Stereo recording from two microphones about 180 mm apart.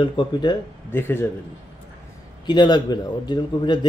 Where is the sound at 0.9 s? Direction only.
10° left (ahead or behind).